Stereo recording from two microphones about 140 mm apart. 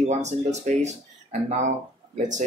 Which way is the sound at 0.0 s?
55° right (ahead or behind).